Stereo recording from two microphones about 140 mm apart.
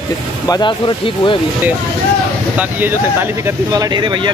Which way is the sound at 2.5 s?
10° right (ahead or behind).